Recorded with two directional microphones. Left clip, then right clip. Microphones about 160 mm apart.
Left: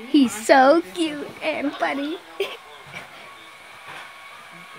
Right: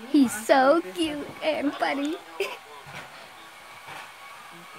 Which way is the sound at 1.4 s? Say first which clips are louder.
Left 2 dB; 10° right (ahead or behind).